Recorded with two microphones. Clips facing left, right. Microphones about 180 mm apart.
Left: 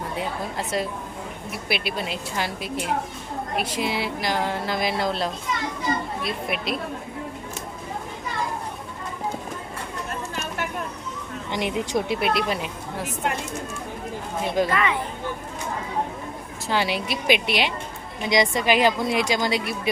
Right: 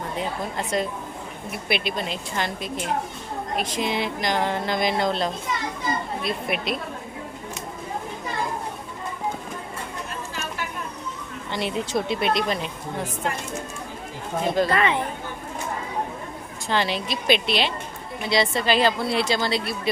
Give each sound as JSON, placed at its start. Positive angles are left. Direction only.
{"t": 0.2, "sound": "a woman's voice", "side_deg": 5}
{"t": 11.5, "sound": "a woman's voice", "side_deg": 15}
{"t": 14.7, "sound": "speech", "side_deg": -30}
{"t": 16.6, "sound": "a woman's voice", "side_deg": 10}